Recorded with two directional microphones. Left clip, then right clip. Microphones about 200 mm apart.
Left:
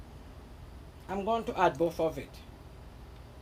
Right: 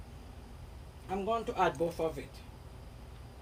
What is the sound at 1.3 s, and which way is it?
Speech, 45° left (ahead or behind).